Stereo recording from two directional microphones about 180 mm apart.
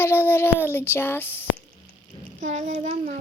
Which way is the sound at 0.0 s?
10° left (ahead or behind).